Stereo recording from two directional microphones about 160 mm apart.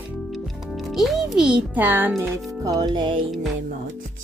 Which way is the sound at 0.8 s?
Centre (ahead or behind).